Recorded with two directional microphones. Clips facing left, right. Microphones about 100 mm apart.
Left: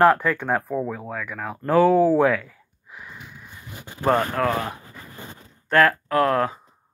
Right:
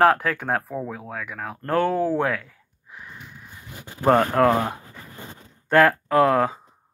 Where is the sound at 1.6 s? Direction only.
10° left (ahead or behind).